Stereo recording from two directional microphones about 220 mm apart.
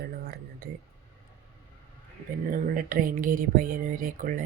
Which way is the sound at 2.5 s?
40° right (ahead or behind).